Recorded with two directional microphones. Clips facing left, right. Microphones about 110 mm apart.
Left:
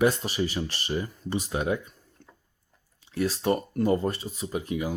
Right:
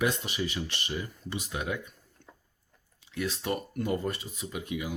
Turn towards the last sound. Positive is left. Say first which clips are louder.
# left 5 dB
turn(degrees=40)  # may be behind; listen again after turning